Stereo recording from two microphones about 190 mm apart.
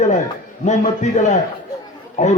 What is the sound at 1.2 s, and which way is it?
A man's voice, 35° left (ahead or behind).